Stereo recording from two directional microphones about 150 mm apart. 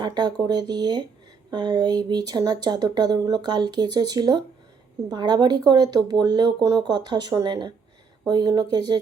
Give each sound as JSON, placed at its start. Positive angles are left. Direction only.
{"t": 0.0, "sound": "speech", "side_deg": -30}